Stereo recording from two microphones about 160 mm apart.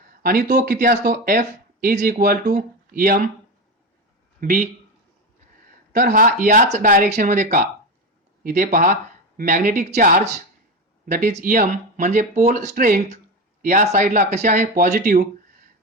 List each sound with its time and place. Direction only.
0.2 s speech: 65° right (ahead or behind)
4.4 s speech: 55° right (ahead or behind)
5.9 s speech: 55° right (ahead or behind)
8.4 s speech: 60° right (ahead or behind)
11.0 s a man's voice: 65° right (ahead or behind)
11.3 s speech: 45° right (ahead or behind)